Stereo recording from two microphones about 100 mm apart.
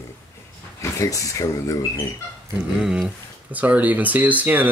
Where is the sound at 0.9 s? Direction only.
35° left (ahead or behind).